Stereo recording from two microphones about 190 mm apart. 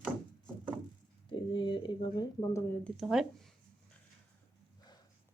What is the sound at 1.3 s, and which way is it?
Speech, 25° left (ahead or behind).